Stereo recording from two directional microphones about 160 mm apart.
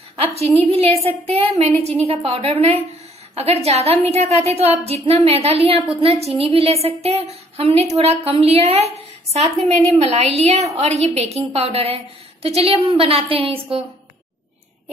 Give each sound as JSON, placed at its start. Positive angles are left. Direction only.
{"t": 0.2, "sound": "a woman's voice", "side_deg": -40}